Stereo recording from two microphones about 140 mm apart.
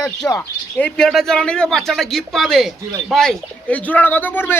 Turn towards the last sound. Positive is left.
turn(degrees=15)  # may be behind; listen again after turning